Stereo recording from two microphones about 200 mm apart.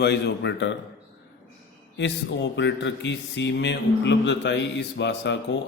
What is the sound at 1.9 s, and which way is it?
Speech, 60° left (ahead or behind).